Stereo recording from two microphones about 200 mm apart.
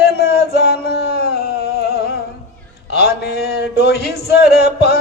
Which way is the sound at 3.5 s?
55° left (ahead or behind).